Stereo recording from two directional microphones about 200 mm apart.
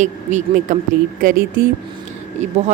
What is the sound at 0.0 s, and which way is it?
A woman's voice, 35° right (ahead or behind).